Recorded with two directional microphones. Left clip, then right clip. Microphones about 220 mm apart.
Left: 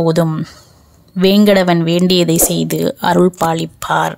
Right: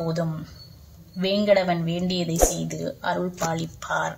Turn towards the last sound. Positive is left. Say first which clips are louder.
# left 11 dB
turn(degrees=40)  # may be behind; listen again after turning